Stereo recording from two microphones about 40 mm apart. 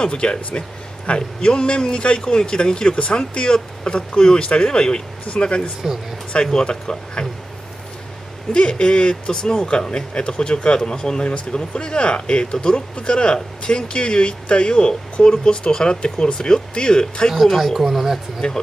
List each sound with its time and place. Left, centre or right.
0.0 s speech: left
8.5 s speech: left
17.3 s speech: centre
18.4 s speech: left